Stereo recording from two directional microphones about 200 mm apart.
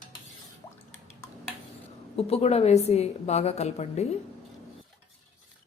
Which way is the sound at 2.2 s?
30° left (ahead or behind).